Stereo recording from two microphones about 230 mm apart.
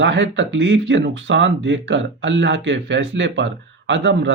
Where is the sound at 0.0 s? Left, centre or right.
Right.